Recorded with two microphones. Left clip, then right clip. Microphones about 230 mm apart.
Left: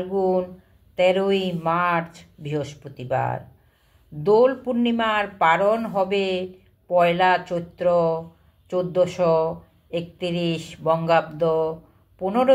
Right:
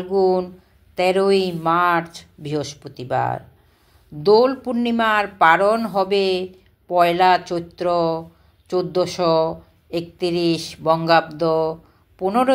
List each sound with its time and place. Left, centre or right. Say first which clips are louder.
0.1 s speech: right 5 dB; right